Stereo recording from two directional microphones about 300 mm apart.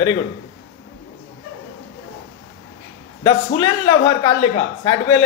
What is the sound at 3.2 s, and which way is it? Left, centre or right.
A man's voice, centre.